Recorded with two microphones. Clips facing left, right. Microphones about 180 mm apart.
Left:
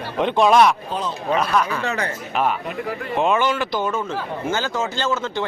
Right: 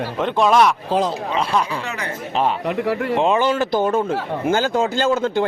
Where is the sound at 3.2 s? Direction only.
30° right (ahead or behind).